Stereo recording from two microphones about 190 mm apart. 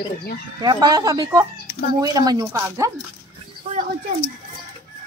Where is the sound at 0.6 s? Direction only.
20° right (ahead or behind).